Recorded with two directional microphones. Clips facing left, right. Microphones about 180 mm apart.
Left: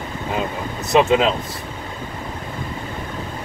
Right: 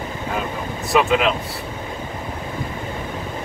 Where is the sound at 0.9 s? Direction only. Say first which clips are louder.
Left 3 dB; 25° left (ahead or behind).